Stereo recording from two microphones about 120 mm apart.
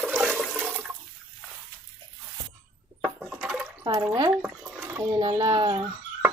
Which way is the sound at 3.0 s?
Centre (ahead or behind).